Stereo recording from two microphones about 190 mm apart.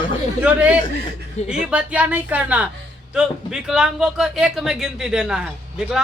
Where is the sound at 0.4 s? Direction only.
5° right (ahead or behind).